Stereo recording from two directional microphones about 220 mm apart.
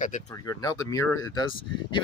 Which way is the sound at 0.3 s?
15° left (ahead or behind).